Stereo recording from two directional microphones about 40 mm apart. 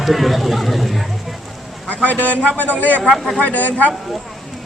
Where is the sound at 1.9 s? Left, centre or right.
Left.